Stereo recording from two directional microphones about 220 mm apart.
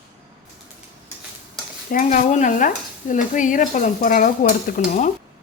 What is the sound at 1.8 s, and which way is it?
Stir, 35° left (ahead or behind).